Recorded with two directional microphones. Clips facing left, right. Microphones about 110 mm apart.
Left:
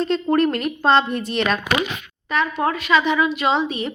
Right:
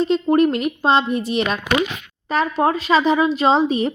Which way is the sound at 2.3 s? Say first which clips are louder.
Right 3 dB; 40° right (ahead or behind).